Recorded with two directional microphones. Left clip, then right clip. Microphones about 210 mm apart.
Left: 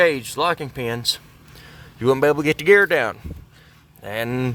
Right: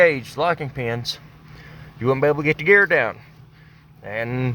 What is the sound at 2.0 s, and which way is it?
Speech, 20° left (ahead or behind).